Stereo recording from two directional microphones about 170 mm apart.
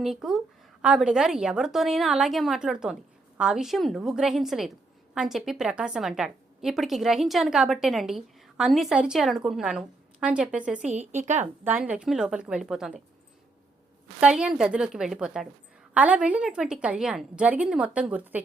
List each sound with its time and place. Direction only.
0.0 s a woman's voice: centre (ahead or behind)
10.9 s a woman's voice: 45° right (ahead or behind)
11.6 s a woman's voice: 10° right (ahead or behind)
14.2 s a woman's voice: 5° right (ahead or behind)